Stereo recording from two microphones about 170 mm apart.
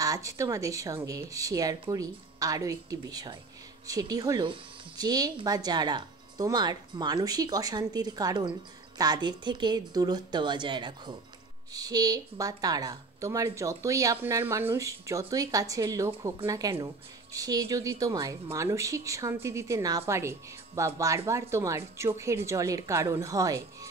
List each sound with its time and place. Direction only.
0.0 s a woman's voice: 20° right (ahead or behind)